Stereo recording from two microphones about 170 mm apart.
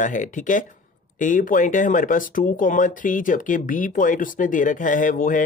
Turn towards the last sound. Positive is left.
turn(degrees=50)  # may be behind; listen again after turning